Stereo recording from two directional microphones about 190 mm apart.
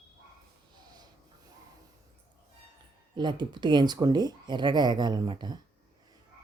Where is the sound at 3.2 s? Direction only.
25° right (ahead or behind).